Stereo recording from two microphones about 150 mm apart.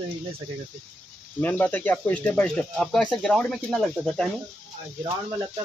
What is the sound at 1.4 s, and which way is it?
Speech, 10° left (ahead or behind).